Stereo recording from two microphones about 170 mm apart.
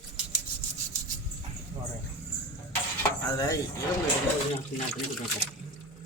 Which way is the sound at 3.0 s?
20° left (ahead or behind).